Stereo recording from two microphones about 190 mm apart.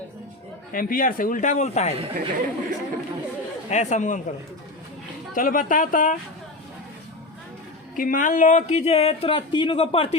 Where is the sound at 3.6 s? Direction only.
40° left (ahead or behind).